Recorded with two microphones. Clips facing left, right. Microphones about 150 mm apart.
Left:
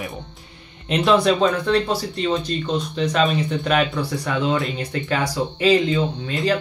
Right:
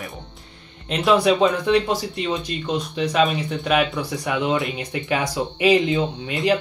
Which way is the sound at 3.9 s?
15° right (ahead or behind).